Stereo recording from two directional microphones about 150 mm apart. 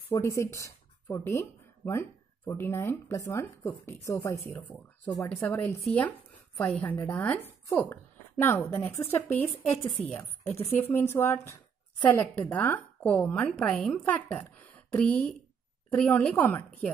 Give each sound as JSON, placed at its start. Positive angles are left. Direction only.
{"t": 0.1, "sound": "a woman's voice", "side_deg": 20}